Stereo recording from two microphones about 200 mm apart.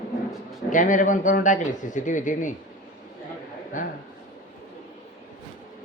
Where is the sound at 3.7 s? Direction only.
40° left (ahead or behind).